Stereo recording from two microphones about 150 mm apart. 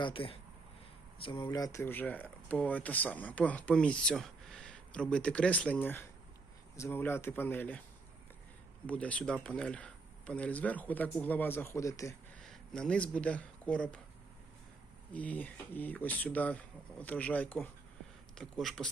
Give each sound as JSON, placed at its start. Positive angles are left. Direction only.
{"t": 0.0, "sound": "speech", "side_deg": 35}
{"t": 1.5, "sound": "speech", "side_deg": 20}
{"t": 8.9, "sound": "speech", "side_deg": 10}
{"t": 12.4, "sound": "speech", "side_deg": 5}
{"t": 15.1, "sound": "speech", "side_deg": 10}